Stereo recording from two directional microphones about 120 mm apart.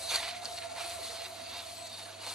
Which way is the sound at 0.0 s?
5° right (ahead or behind).